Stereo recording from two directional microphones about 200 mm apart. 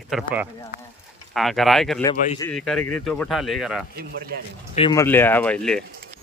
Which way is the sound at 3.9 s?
55° right (ahead or behind).